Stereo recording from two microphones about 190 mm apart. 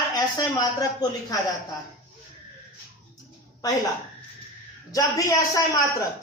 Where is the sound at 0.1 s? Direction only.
20° left (ahead or behind).